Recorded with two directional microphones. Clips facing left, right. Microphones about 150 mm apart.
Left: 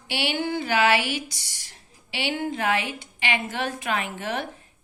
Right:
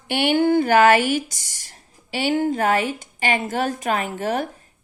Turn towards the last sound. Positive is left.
turn(degrees=-40)  # may be behind; listen again after turning